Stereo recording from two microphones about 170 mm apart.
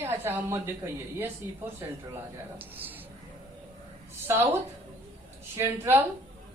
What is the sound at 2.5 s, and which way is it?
Speech, 10° right (ahead or behind).